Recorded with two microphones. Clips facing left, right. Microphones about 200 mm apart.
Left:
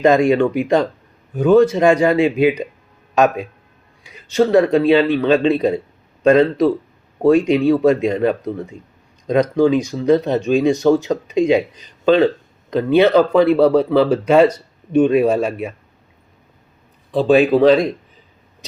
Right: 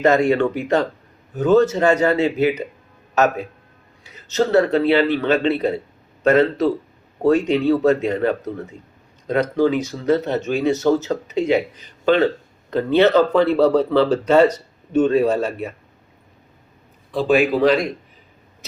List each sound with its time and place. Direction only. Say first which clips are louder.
0.0 s speech: left 3 dB; 15° left (ahead or behind)
4.0 s speech: left 4 dB; 15° left (ahead or behind)
17.1 s speech: left 4 dB; 20° left (ahead or behind)